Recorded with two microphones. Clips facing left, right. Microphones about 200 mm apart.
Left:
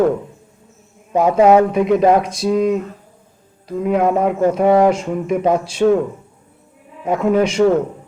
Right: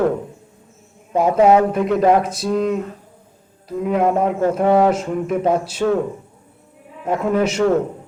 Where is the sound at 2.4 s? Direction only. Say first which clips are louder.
Left 5 dB; 10° left (ahead or behind).